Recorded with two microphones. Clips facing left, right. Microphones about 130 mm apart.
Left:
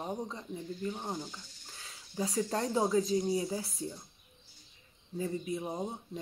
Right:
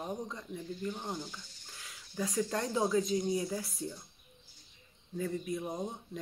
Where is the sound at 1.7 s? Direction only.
30° left (ahead or behind).